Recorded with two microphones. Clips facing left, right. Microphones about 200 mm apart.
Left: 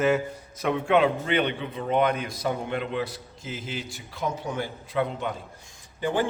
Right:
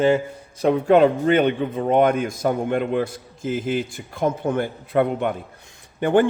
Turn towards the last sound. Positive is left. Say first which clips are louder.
# right 8 dB
turn(degrees=-60)  # may be behind; listen again after turning